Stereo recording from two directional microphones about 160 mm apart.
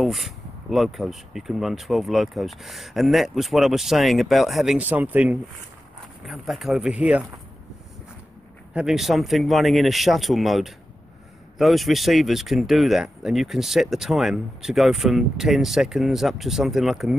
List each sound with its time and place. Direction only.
0.0 s speech: centre (ahead or behind)
8.7 s speech: centre (ahead or behind)